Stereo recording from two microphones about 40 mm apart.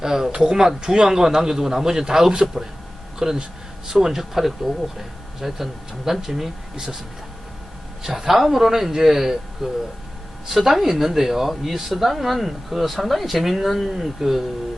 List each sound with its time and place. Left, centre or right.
0.0 s a man's voice: centre
8.0 s a man's voice: centre